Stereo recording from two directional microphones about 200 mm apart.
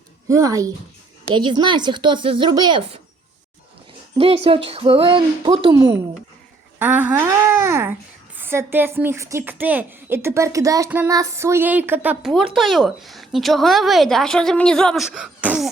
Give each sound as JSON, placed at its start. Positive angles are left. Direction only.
{"t": 0.3, "sound": "speech", "side_deg": -15}
{"t": 4.4, "sound": "speech", "side_deg": -30}
{"t": 6.7, "sound": "a woman's voice", "side_deg": -10}